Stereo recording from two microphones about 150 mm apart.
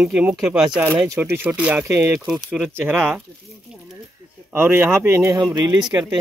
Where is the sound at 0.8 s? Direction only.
15° right (ahead or behind).